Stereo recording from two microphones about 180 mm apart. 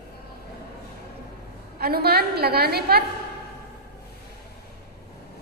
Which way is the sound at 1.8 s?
60° right (ahead or behind).